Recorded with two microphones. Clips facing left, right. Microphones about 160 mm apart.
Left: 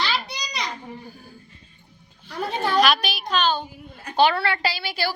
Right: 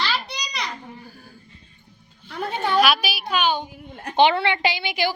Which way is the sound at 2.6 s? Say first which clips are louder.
Even; centre (ahead or behind).